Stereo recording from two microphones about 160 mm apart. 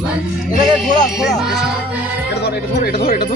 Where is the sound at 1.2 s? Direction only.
5° right (ahead or behind).